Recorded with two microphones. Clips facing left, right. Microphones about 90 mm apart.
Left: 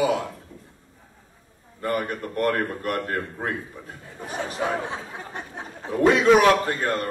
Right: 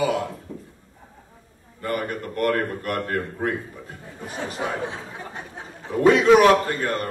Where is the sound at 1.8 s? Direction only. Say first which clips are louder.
Left 1 dB; 20° left (ahead or behind).